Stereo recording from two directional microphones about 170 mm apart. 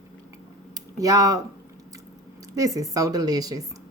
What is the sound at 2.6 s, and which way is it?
Speech, 20° right (ahead or behind).